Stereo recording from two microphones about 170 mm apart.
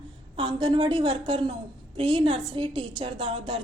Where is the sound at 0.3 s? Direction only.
35° right (ahead or behind).